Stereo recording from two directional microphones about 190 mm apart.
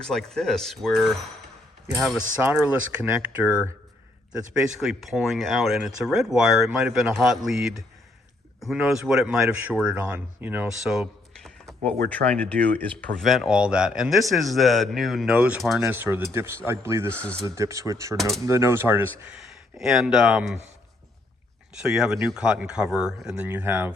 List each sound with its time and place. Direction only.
0.0 s speech: centre (ahead or behind)
4.8 s speech: centre (ahead or behind)
19.4 s speech: centre (ahead or behind)
21.8 s speech: 5° right (ahead or behind)